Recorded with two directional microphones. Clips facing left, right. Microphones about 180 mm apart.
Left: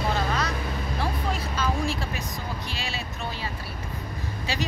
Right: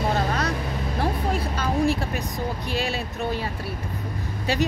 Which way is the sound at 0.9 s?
55° right (ahead or behind).